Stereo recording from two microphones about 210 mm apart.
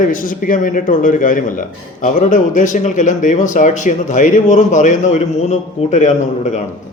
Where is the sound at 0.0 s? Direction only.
40° left (ahead or behind).